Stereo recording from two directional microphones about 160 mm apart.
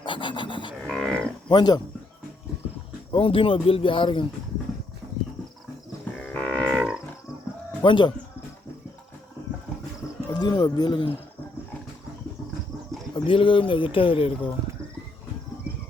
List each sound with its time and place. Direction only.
0.0 s livestock: 30° left (ahead or behind)
0.8 s livestock: centre (ahead or behind)
1.5 s speech: 25° left (ahead or behind)
3.1 s speech: 35° left (ahead or behind)
6.1 s livestock: 5° left (ahead or behind)
7.8 s speech: 30° left (ahead or behind)
10.3 s speech: 25° left (ahead or behind)
13.1 s speech: 35° left (ahead or behind)